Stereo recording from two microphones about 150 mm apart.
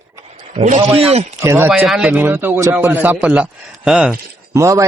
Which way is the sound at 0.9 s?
40° right (ahead or behind).